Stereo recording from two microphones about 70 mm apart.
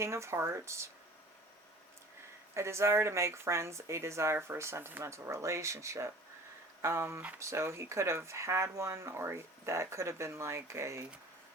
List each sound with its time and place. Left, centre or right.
0.0 s speech: right
2.6 s speech: right